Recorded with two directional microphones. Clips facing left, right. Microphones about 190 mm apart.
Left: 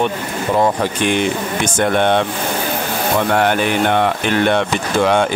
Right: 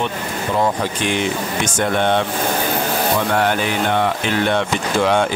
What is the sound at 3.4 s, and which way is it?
Speech, 60° left (ahead or behind).